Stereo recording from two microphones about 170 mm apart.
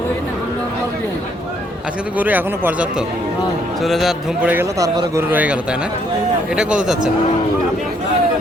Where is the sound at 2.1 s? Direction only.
10° right (ahead or behind).